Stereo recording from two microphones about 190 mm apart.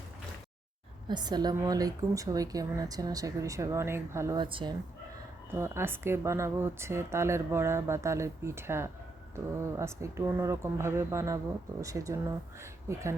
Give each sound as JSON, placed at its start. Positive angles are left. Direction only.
{"t": 1.0, "sound": "a woman's voice", "side_deg": -20}
{"t": 4.4, "sound": "a woman's voice", "side_deg": -25}
{"t": 5.5, "sound": "speech", "side_deg": -15}